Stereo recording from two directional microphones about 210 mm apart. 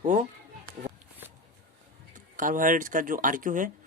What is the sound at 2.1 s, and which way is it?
Speech, 40° right (ahead or behind).